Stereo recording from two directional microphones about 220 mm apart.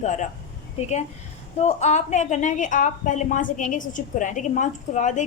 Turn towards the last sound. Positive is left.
turn(degrees=35)  # may be behind; listen again after turning